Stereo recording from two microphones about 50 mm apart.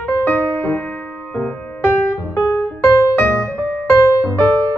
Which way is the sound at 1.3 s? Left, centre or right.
Left.